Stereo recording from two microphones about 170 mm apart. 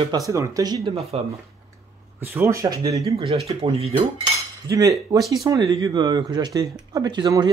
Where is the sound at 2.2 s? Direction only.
15° right (ahead or behind).